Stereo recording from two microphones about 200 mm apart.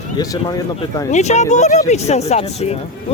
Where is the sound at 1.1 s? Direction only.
35° left (ahead or behind).